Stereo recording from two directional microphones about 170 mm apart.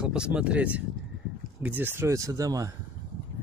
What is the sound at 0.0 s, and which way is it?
Speech, 5° right (ahead or behind).